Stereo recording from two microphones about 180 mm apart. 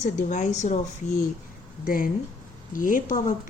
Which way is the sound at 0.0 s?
45° left (ahead or behind).